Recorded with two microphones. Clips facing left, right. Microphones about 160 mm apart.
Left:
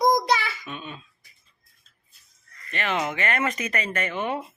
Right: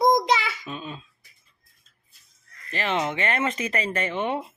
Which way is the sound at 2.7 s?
30° right (ahead or behind).